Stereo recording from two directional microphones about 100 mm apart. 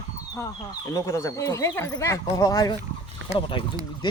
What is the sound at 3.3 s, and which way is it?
Speech, 60° left (ahead or behind).